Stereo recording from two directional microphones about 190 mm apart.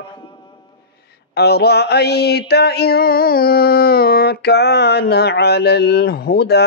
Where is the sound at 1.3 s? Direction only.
60° left (ahead or behind).